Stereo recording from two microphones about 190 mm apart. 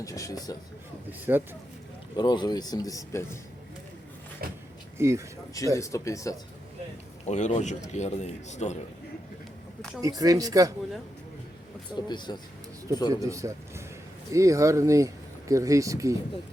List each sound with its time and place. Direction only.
0.0 s speech: 15° left (ahead or behind)
1.3 s speech: 10° right (ahead or behind)
2.1 s speech: 25° left (ahead or behind)
4.9 s speech: 15° right (ahead or behind)
5.7 s speech: 15° left (ahead or behind)
7.3 s a man's voice: 40° left (ahead or behind)
10.0 s speech: 20° right (ahead or behind)
11.9 s speech: 25° left (ahead or behind)
13.2 s speech: 15° right (ahead or behind)